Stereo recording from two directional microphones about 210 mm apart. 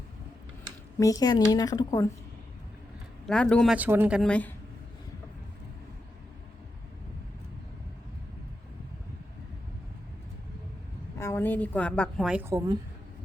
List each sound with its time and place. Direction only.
0.9 s a woman's voice: 15° left (ahead or behind)
3.2 s a woman's voice: 5° left (ahead or behind)
3.8 s a woman's voice: 10° right (ahead or behind)
11.2 s a woman's voice: 10° left (ahead or behind); by 12.8 s 15° right (ahead or behind)